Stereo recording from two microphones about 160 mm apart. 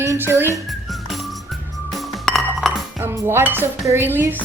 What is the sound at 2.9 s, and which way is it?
Music, 15° right (ahead or behind).